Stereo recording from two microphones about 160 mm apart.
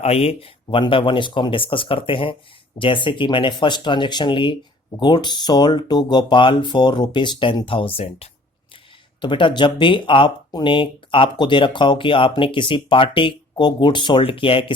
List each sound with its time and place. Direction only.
0.0 s speech: 40° left (ahead or behind)